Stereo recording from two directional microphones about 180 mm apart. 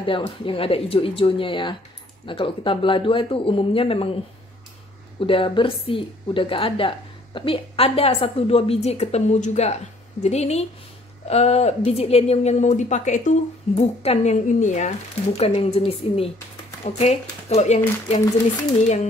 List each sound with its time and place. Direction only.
0.0 s speech: 30° left (ahead or behind)
5.2 s speech: 30° left (ahead or behind)